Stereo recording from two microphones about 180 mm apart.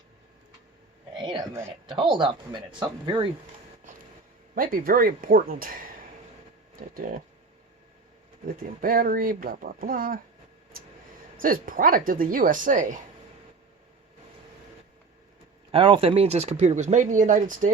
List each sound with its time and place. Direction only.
1.2 s speech: 25° right (ahead or behind)
4.5 s speech: 50° right (ahead or behind)
6.9 s speech: 50° right (ahead or behind)
8.4 s speech: 55° right (ahead or behind)
11.3 s speech: 50° right (ahead or behind)
15.7 s speech: 30° right (ahead or behind); by 17.7 s 45° right (ahead or behind)